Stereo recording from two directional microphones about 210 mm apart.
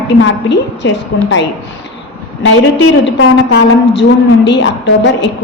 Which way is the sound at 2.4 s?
60° left (ahead or behind).